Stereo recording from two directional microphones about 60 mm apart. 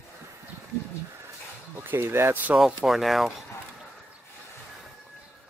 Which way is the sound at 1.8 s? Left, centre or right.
Right.